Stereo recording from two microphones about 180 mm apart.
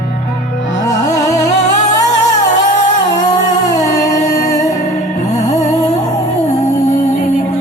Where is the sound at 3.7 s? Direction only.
20° left (ahead or behind).